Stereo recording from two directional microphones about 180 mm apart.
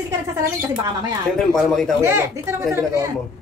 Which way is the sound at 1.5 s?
Centre (ahead or behind).